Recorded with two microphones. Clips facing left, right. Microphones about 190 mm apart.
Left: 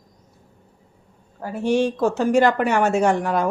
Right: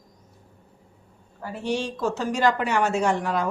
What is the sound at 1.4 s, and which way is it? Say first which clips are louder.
Speech: left 8 dB; 45° left (ahead or behind).